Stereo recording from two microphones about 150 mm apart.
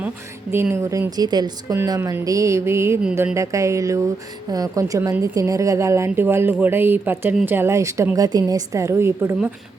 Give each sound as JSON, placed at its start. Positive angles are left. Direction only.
{"t": 0.5, "sound": "a woman's voice", "side_deg": -15}